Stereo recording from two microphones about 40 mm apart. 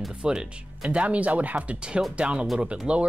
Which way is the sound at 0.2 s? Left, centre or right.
Centre.